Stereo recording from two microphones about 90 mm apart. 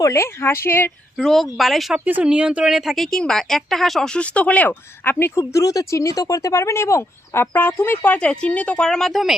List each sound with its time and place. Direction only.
0.0 s speech: 30° left (ahead or behind)
1.1 s speech: centre (ahead or behind)
2.0 s speech: 15° right (ahead or behind)
2.7 s speech: centre (ahead or behind); by 8.9 s 15° left (ahead or behind)
8.9 s speech: 5° left (ahead or behind)